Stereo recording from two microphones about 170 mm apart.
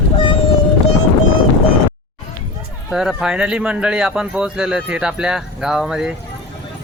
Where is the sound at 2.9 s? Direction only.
5° right (ahead or behind).